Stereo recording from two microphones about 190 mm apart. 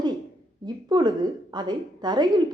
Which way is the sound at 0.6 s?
20° right (ahead or behind).